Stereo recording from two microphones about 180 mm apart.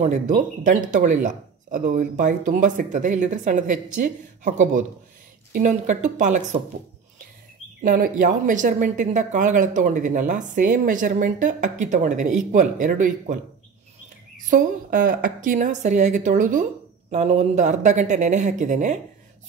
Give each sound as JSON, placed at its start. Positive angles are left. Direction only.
{"t": 0.0, "sound": "speech", "side_deg": -45}
{"t": 7.8, "sound": "speech", "side_deg": -50}
{"t": 14.5, "sound": "speech", "side_deg": -50}